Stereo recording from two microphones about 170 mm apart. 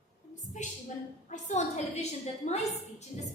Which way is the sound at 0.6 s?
45° left (ahead or behind).